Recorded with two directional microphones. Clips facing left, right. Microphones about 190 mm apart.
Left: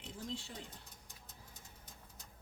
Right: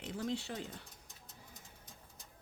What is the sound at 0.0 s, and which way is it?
Speech, 70° right (ahead or behind).